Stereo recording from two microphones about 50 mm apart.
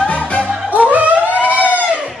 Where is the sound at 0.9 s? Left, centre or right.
Right.